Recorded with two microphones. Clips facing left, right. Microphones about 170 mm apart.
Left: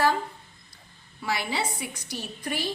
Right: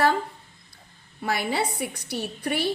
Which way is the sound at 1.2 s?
55° right (ahead or behind).